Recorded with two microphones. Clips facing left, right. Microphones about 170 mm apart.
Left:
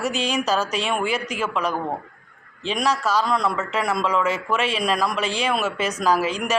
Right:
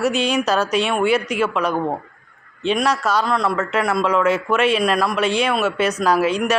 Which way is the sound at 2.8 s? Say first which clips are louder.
Left 1 dB; centre (ahead or behind).